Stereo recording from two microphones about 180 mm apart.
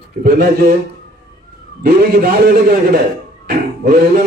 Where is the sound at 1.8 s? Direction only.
55° right (ahead or behind).